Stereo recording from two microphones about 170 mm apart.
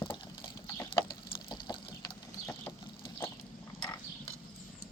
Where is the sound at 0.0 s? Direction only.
30° left (ahead or behind).